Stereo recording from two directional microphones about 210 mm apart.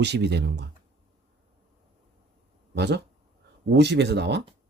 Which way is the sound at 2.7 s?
50° right (ahead or behind).